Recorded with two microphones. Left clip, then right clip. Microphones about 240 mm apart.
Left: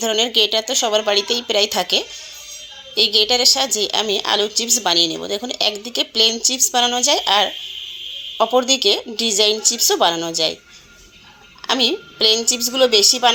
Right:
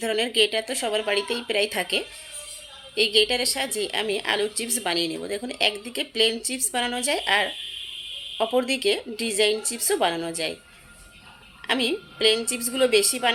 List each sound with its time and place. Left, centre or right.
0.0 s a woman's voice: centre
11.7 s a woman's voice: centre